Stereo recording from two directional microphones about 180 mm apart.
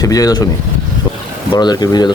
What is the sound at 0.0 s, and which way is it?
Speech, 20° left (ahead or behind).